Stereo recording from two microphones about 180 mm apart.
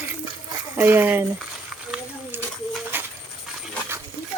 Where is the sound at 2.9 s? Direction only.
10° right (ahead or behind).